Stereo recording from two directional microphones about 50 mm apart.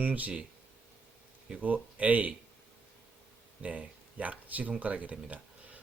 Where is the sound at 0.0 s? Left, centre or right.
Right.